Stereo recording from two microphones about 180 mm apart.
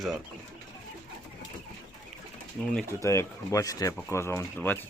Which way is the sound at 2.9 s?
15° left (ahead or behind).